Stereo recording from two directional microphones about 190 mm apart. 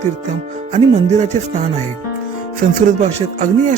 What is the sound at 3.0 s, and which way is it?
Music, 40° right (ahead or behind).